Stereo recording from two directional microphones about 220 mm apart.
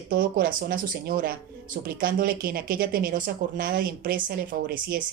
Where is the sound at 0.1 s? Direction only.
40° right (ahead or behind).